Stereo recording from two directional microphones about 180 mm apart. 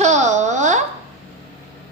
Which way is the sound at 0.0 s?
40° right (ahead or behind).